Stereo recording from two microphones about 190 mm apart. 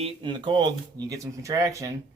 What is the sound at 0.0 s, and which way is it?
Speech, 25° right (ahead or behind).